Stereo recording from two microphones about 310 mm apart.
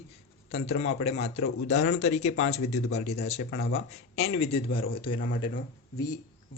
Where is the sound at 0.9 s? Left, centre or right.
Left.